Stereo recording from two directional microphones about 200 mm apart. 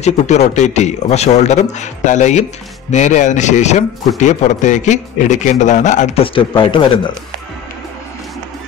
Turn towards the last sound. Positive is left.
turn(degrees=25)  # may be behind; listen again after turning